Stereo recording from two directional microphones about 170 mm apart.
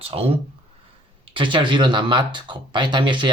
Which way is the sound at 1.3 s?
30° right (ahead or behind).